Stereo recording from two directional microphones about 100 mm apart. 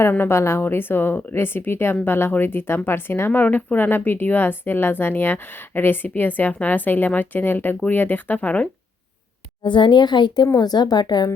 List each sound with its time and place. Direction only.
0.1 s speech: 25° left (ahead or behind)
9.6 s speech: 50° left (ahead or behind)